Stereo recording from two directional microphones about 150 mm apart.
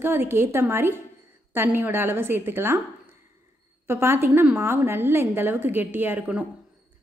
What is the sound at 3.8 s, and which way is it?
A woman's voice, 15° right (ahead or behind).